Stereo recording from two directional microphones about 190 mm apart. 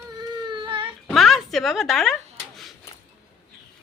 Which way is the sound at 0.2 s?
25° right (ahead or behind).